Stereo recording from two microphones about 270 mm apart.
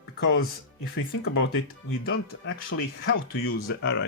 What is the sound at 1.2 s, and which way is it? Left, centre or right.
Speech, left.